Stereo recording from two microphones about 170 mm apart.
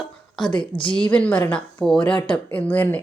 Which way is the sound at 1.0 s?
10° left (ahead or behind).